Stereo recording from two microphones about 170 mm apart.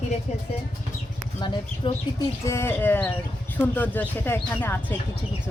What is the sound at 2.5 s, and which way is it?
Speech, 15° left (ahead or behind).